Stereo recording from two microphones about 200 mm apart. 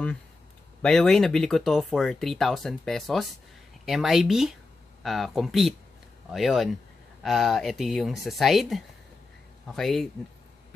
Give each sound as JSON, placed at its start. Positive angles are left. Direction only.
{"t": 0.8, "sound": "speech", "side_deg": 5}